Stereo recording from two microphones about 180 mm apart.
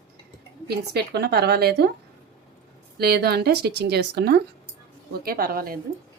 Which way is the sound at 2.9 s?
60° right (ahead or behind).